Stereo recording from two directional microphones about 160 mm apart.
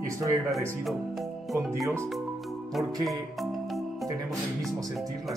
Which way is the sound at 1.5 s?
20° right (ahead or behind).